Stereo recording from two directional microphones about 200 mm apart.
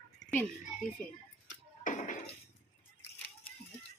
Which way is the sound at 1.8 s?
40° left (ahead or behind).